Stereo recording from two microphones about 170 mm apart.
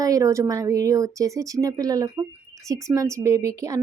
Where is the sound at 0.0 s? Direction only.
20° right (ahead or behind).